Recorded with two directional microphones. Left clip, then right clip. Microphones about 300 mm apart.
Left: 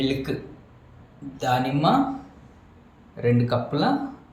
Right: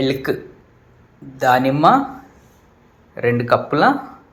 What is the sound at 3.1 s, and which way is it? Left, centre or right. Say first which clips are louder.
Speech: right 7 dB; right.